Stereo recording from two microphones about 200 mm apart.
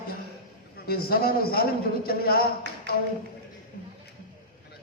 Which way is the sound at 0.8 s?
50° left (ahead or behind).